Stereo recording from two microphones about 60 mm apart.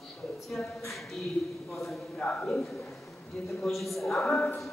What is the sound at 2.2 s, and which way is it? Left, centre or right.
Speech, centre.